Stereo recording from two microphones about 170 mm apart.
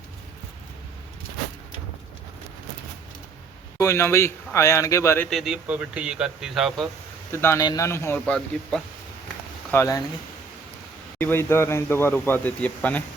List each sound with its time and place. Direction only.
3.8 s speech: 15° left (ahead or behind)
5.3 s speech: centre (ahead or behind)
7.3 s speech: 15° left (ahead or behind)
9.7 s speech: 20° left (ahead or behind)
11.2 s speech: 15° left (ahead or behind)